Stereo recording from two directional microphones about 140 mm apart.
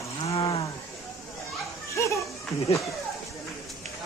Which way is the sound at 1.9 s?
20° left (ahead or behind).